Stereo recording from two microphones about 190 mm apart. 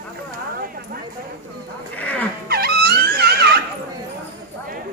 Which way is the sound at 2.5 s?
55° right (ahead or behind).